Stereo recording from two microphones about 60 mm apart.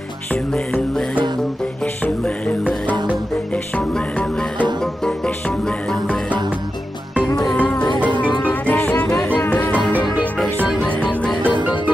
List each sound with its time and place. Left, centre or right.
2.0 s music: left
3.7 s music: centre
8.2 s music: left
11.4 s music: right